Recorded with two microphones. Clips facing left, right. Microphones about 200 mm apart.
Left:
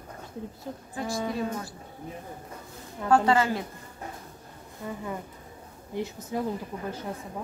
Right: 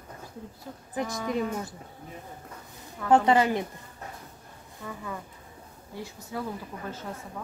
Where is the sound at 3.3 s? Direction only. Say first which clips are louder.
Right 1 dB; 20° right (ahead or behind).